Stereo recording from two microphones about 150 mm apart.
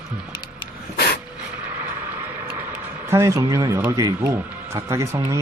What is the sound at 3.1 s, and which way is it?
Speech, 20° right (ahead or behind).